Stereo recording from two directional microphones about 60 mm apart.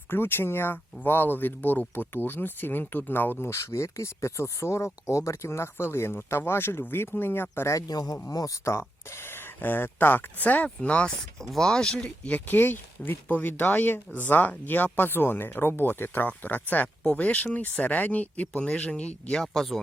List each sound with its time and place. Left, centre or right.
0.1 s speech: left
7.7 s speech: left
8.6 s speech: left
11.5 s speech: centre
12.5 s speech: left
17.0 s speech: centre
19.4 s speech: centre